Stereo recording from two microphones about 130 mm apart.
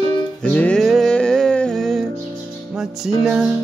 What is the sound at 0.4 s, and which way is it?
Music, 10° left (ahead or behind).